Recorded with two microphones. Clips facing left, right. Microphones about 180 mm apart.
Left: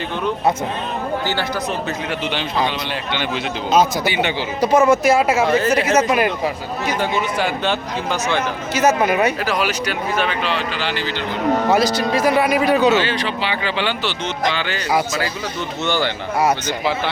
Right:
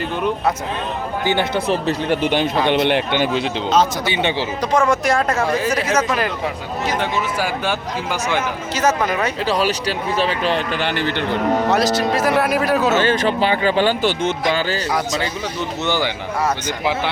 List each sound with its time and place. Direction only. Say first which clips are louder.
1.2 s speech: right 4 dB; 15° right (ahead or behind)
1.5 s speech: right 4 dB; 30° right (ahead or behind)
2.2 s speech: right 3 dB; 50° right (ahead or behind)
2.7 s speech: right 8 dB; 65° right (ahead or behind)
4.1 s speech: right 1 dB; 25° right (ahead or behind)
4.6 s speech: left 4 dB; 5° left (ahead or behind); by 8.4 s 10° right (ahead or behind)
8.7 s speech: left 3 dB; 10° left (ahead or behind)
9.4 s speech: right 2 dB; 30° right (ahead or behind)
10.4 s speech: right 3 dB; 50° right (ahead or behind)
11.7 s speech: even; centre (ahead or behind)
12.9 s speech: right 2 dB; 45° right (ahead or behind)